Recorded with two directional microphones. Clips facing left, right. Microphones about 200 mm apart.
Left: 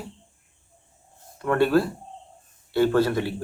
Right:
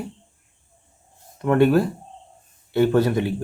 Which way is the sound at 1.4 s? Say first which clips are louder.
Right 3 dB; 20° right (ahead or behind).